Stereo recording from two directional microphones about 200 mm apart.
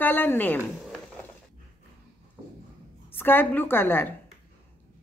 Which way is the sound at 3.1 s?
10° left (ahead or behind).